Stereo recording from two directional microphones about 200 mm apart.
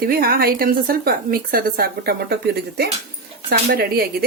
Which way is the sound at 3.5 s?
50° right (ahead or behind).